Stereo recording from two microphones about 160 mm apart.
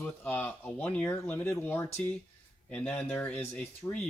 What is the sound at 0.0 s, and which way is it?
Speech, 10° left (ahead or behind).